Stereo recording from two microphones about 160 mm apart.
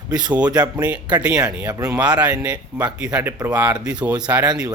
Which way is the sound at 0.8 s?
10° right (ahead or behind).